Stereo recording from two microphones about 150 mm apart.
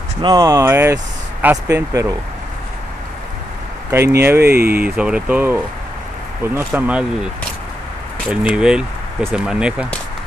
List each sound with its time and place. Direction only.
0.2 s speech: 25° right (ahead or behind)
3.9 s speech: 15° right (ahead or behind)
8.3 s speech: 10° right (ahead or behind)